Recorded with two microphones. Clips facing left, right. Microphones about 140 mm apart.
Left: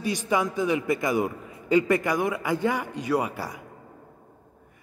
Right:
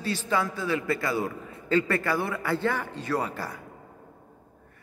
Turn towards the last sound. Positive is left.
turn(degrees=15)  # may be behind; listen again after turning